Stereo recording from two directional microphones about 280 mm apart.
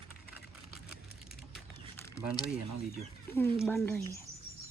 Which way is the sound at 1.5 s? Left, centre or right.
Centre.